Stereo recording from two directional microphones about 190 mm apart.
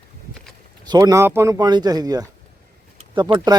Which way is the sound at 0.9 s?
20° right (ahead or behind).